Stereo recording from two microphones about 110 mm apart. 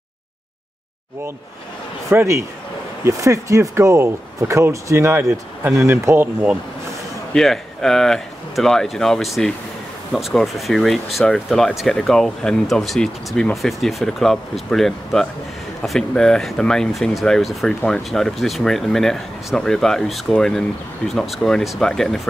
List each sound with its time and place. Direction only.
2.0 s a man's voice: 25° right (ahead or behind)
7.3 s speech: 5° left (ahead or behind)